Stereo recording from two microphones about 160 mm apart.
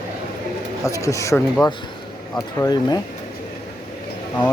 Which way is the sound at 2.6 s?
25° left (ahead or behind).